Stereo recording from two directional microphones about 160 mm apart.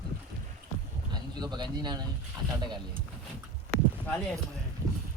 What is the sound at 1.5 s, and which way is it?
Speech, 25° right (ahead or behind).